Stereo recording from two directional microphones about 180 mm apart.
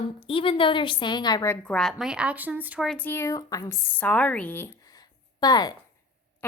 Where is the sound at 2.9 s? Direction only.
10° left (ahead or behind).